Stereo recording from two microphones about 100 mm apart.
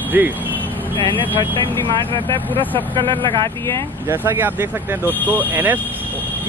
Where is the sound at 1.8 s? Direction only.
55° right (ahead or behind).